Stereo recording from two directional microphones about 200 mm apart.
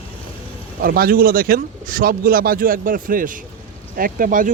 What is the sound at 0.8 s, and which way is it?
Speech, 45° right (ahead or behind).